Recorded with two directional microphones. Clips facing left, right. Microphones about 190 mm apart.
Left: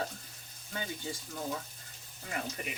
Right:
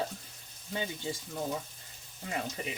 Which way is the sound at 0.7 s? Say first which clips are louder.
Right 3 dB; 25° right (ahead or behind).